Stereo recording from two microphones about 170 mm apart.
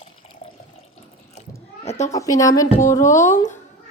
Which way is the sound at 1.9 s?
40° left (ahead or behind).